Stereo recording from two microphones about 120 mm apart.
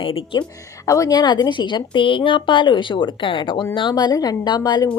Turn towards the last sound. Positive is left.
turn(degrees=35)  # may be behind; listen again after turning